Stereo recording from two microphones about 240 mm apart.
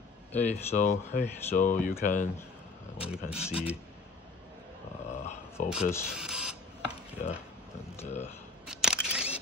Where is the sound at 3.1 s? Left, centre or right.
Centre.